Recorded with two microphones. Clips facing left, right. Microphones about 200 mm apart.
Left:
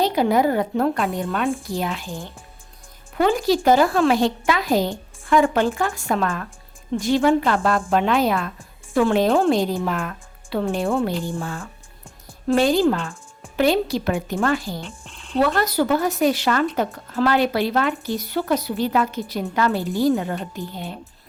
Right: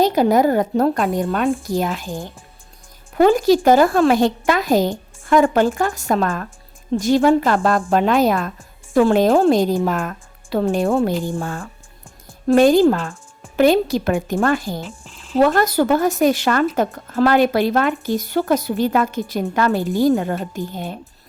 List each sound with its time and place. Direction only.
0.0 s speech: 45° right (ahead or behind)
14.8 s speech: centre (ahead or behind)
15.4 s speech: 45° right (ahead or behind)